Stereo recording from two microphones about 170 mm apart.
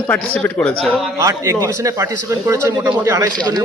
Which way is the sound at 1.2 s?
20° right (ahead or behind).